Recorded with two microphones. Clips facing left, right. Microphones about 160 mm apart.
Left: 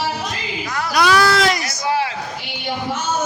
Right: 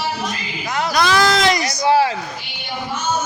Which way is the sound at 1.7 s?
25° right (ahead or behind).